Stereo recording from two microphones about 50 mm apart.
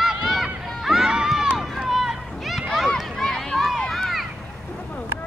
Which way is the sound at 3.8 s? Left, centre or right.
Centre.